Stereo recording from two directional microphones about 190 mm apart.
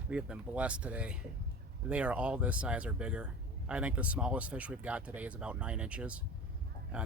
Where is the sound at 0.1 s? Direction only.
5° right (ahead or behind).